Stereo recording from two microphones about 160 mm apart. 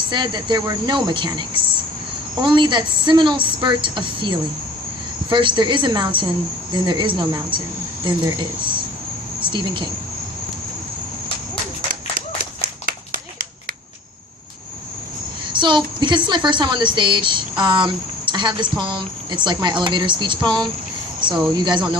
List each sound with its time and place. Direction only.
0.1 s a woman's voice: 30° right (ahead or behind)
12.1 s run: 65° right (ahead or behind)
15.5 s a woman's voice: 30° right (ahead or behind)